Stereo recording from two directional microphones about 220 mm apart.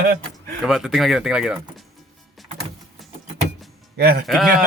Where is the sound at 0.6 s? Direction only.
Centre (ahead or behind).